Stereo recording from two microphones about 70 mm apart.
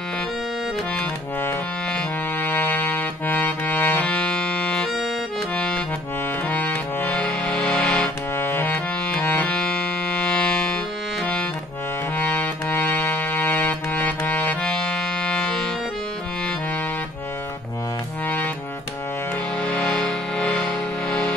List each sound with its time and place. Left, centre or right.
2.4 s accordion: left
4.1 s music: centre
6.5 s music: left
7.2 s accordion: centre
8.4 s music: left
9.2 s music: centre
12.2 s music: left
14.6 s music: centre
19.6 s music: centre